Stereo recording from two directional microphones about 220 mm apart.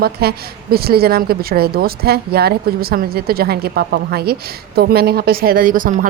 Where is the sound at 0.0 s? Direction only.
45° right (ahead or behind).